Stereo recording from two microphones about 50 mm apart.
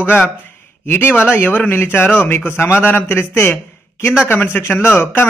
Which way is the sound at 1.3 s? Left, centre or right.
Left.